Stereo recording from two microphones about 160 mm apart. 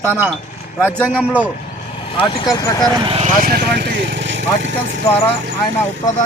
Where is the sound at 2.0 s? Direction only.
35° left (ahead or behind).